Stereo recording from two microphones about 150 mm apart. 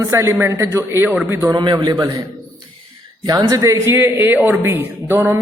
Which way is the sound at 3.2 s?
25° right (ahead or behind).